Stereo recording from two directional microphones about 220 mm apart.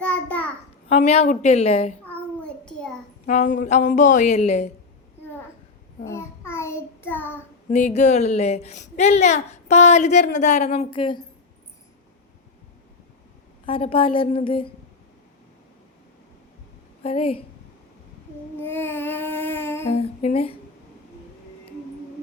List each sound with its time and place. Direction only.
0.0 s a sound: 5° left (ahead or behind)
0.9 s a woman's voice: 30° left (ahead or behind)
2.6 s a sound: 5° left (ahead or behind)
3.2 s a child's voice: 35° left (ahead or behind)
6.1 s child singing: 10° left (ahead or behind)
7.7 s a child's voice: 30° left (ahead or behind)
13.7 s a woman's voice: 25° left (ahead or behind)
17.0 s a woman's voice: 25° left (ahead or behind)
18.6 s child singing: 10° left (ahead or behind)
19.9 s a woman's voice: 25° left (ahead or behind)